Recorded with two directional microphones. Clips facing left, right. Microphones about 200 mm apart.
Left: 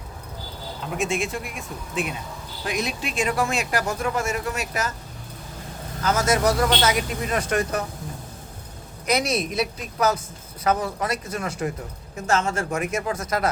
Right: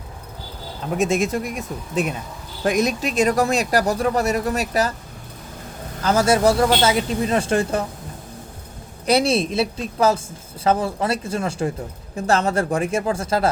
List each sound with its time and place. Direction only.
0.9 s speech: 40° right (ahead or behind)
6.0 s speech: 30° right (ahead or behind)
9.0 s speech: 30° right (ahead or behind)